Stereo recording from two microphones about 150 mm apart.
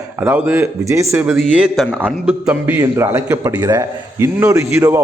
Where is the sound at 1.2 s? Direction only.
5° right (ahead or behind).